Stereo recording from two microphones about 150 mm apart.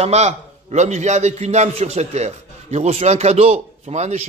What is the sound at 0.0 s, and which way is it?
A man's voice, 45° right (ahead or behind).